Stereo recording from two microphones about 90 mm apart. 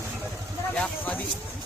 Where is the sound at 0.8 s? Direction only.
15° left (ahead or behind).